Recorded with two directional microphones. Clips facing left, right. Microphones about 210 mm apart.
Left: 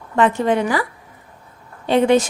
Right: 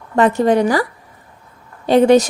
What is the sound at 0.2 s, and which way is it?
Speech, 40° right (ahead or behind).